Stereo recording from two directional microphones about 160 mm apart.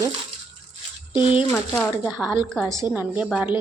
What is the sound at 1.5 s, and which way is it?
Speech, 10° left (ahead or behind).